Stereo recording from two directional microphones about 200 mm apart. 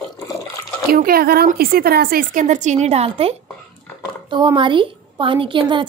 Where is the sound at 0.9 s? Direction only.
50° right (ahead or behind).